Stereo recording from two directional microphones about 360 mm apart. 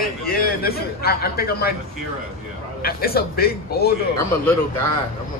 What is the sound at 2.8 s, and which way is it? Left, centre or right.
A man's voice, left.